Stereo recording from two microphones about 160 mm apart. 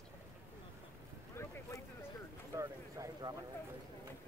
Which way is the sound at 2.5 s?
20° right (ahead or behind).